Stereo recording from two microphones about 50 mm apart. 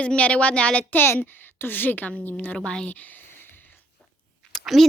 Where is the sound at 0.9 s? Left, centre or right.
Left.